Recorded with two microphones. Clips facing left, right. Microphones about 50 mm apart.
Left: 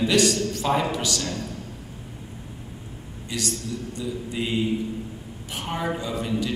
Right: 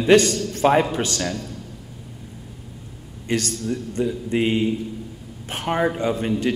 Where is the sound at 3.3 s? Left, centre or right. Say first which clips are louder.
Right 6 dB; right.